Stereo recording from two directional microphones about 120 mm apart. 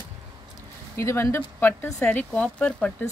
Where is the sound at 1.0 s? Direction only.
25° left (ahead or behind).